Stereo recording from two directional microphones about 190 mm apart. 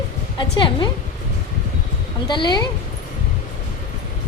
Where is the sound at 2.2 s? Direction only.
25° left (ahead or behind).